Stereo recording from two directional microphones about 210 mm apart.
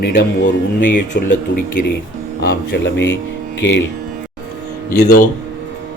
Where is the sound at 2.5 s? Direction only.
55° left (ahead or behind).